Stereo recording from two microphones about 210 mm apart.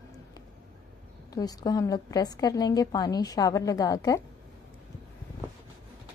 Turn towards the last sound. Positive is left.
turn(degrees=15)  # may be behind; listen again after turning